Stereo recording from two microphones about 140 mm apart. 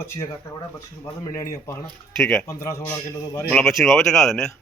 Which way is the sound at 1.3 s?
20° left (ahead or behind).